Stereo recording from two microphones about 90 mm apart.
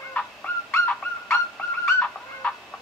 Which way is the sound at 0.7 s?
20° left (ahead or behind).